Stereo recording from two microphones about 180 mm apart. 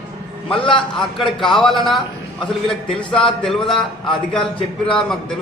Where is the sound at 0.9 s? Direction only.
Centre (ahead or behind).